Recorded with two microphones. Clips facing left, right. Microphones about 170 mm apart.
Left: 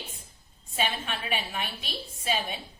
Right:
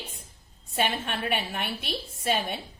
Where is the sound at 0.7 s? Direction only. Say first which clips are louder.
Right 3 dB; 60° right (ahead or behind).